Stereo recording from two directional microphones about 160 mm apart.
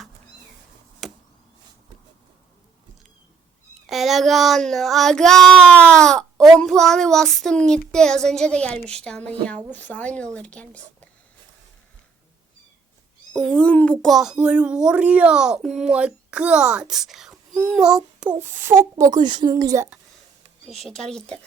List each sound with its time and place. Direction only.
1.0 s a sound: centre (ahead or behind)
3.8 s child singing: centre (ahead or behind)
9.7 s a woman's voice: 10° left (ahead or behind)
13.3 s child singing: 5° left (ahead or behind); by 18.7 s 15° right (ahead or behind)
18.9 s a woman's voice: 25° right (ahead or behind)
21.1 s child singing: 5° left (ahead or behind)